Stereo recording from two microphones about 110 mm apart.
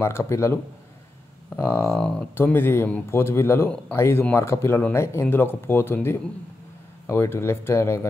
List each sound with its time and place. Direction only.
0.0 s speech: 25° left (ahead or behind)
1.6 s speech: 20° left (ahead or behind)
7.1 s speech: 25° left (ahead or behind)